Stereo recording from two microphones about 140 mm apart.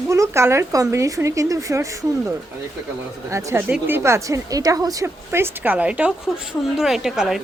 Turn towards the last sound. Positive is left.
turn(degrees=-5)  # may be behind; listen again after turning